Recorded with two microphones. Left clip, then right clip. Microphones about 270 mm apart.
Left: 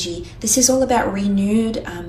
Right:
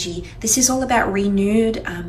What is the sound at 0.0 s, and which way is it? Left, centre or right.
Speech, centre.